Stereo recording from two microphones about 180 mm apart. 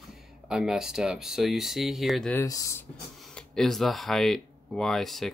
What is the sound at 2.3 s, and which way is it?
Speech, 20° left (ahead or behind).